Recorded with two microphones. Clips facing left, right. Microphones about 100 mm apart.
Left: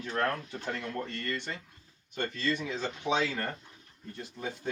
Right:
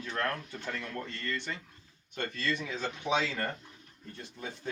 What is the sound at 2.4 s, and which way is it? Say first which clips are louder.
Speech: left 2 dB; 30° left (ahead or behind).